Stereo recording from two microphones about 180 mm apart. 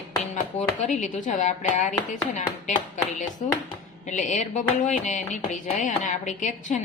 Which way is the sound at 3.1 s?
40° left (ahead or behind).